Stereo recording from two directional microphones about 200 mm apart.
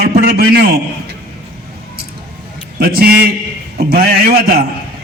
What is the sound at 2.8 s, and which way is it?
A man's voice, 50° right (ahead or behind).